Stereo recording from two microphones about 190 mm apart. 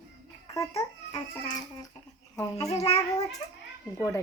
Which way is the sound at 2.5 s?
35° left (ahead or behind).